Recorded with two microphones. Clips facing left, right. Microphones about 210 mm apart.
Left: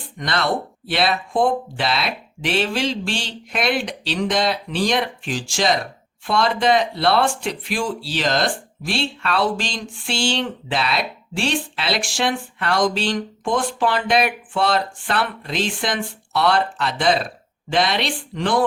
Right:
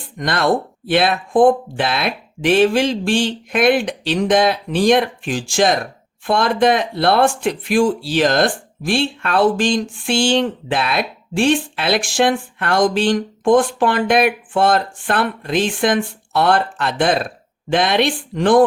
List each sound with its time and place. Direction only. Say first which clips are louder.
0.2 s speech: right 5 dB; 50° right (ahead or behind)